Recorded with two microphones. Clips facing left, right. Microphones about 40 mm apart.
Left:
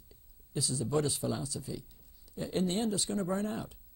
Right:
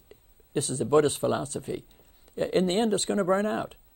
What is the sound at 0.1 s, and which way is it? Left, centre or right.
Speech, right.